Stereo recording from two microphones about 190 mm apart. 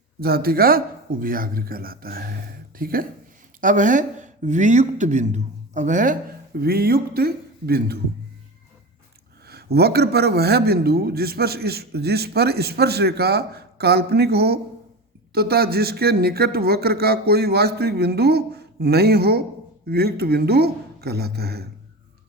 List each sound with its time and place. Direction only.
0.2 s speech: 55° right (ahead or behind)
9.5 s a man's voice: 55° right (ahead or behind)